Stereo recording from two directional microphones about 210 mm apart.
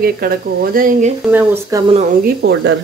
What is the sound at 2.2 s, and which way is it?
Speech, 55° right (ahead or behind).